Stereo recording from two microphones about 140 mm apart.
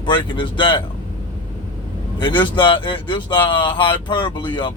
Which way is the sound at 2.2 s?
35° left (ahead or behind).